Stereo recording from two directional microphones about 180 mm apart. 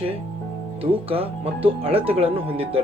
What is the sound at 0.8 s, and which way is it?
Speech, 30° right (ahead or behind).